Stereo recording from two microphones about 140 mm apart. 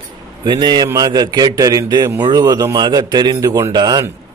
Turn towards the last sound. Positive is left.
turn(degrees=-30)  # may be behind; listen again after turning